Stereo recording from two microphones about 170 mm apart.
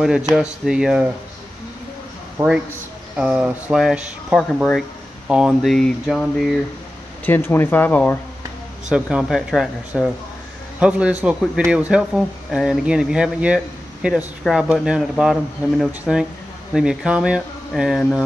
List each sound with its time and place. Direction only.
0.4 s a man's voice: 5° right (ahead or behind)
2.3 s a man's voice: 5° right (ahead or behind)
7.2 s speech: 10° left (ahead or behind)
8.8 s a man's voice: 5° right (ahead or behind)